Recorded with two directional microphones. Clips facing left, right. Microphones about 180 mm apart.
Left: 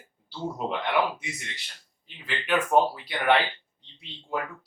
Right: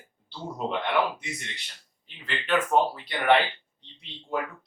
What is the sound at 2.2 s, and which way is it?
Speech, 10° left (ahead or behind).